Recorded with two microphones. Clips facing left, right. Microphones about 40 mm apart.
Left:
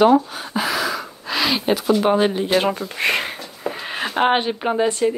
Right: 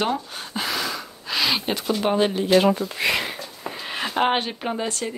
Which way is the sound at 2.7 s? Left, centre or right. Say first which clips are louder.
Left 2 dB; left.